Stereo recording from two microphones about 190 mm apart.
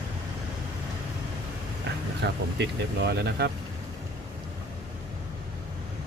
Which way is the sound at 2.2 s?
65° right (ahead or behind).